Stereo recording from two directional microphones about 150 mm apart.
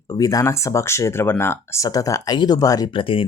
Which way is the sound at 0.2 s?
25° left (ahead or behind).